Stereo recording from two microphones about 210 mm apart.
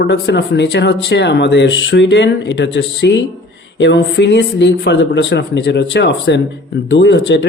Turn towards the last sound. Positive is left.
turn(degrees=55)  # may be behind; listen again after turning